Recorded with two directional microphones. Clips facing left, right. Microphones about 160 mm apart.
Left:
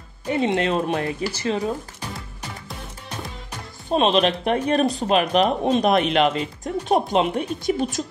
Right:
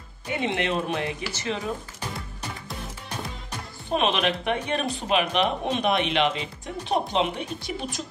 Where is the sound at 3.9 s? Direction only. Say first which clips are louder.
Left 5 dB; 35° left (ahead or behind).